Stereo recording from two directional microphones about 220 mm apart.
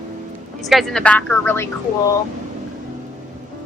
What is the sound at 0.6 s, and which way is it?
Speech, centre (ahead or behind).